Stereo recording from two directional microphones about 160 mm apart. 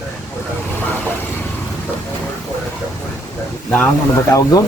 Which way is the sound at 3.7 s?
15° left (ahead or behind).